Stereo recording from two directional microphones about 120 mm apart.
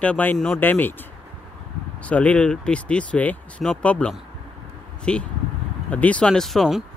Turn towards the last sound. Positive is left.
turn(degrees=0)  # may be behind; listen again after turning